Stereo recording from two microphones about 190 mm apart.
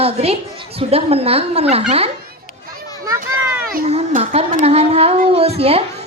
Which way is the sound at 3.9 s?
30° right (ahead or behind).